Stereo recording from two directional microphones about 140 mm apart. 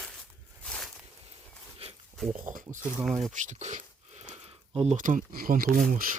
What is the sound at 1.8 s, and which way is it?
Pig, 45° right (ahead or behind).